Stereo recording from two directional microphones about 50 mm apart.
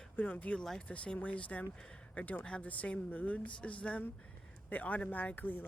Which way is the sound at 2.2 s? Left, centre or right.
Left.